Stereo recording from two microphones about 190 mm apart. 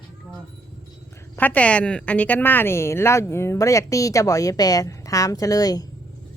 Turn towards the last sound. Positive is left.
turn(degrees=20)  # may be behind; listen again after turning